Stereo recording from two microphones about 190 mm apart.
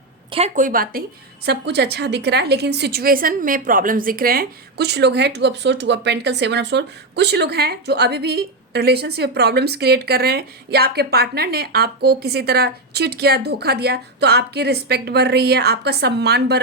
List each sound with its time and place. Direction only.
0.3 s a woman's voice: 35° right (ahead or behind)
1.5 s a woman's voice: 60° right (ahead or behind)